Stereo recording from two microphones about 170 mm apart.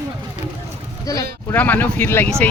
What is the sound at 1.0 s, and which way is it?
Speech, 20° left (ahead or behind).